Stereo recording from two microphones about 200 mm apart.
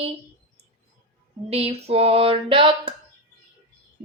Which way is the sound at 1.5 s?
30° right (ahead or behind).